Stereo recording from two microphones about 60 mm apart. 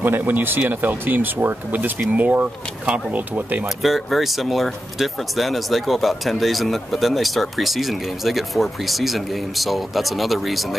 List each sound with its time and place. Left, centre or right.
0.0 s speech: right
3.8 s speech: centre